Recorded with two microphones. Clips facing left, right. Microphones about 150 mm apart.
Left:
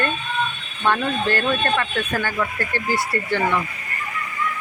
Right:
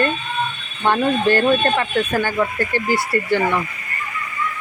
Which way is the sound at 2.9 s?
10° right (ahead or behind).